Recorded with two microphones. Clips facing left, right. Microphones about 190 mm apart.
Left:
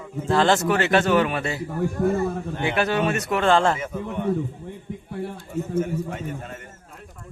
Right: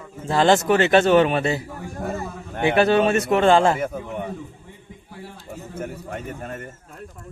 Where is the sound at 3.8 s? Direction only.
55° right (ahead or behind).